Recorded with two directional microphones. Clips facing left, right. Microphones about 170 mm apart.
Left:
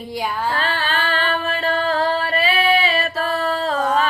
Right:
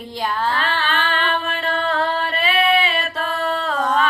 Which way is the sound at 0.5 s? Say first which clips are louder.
Even; 35° left (ahead or behind).